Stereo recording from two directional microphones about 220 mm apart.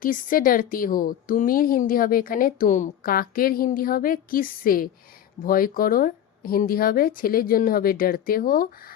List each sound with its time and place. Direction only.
0.0 s speech: 40° left (ahead or behind)